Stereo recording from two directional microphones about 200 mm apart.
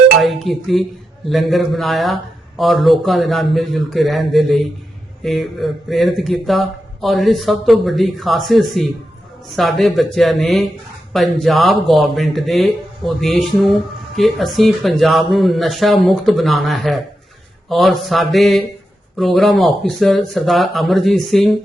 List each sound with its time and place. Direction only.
0.2 s speech: centre (ahead or behind)